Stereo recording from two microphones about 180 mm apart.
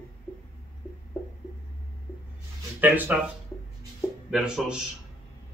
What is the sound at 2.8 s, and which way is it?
Speech, 10° right (ahead or behind).